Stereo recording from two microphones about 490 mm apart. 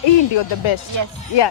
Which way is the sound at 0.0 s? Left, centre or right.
Left.